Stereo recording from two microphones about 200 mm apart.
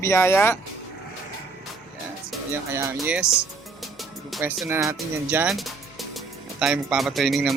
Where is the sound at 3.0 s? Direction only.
5° right (ahead or behind).